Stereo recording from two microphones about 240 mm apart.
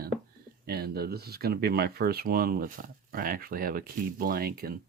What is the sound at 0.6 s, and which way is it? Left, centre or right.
Speech, right.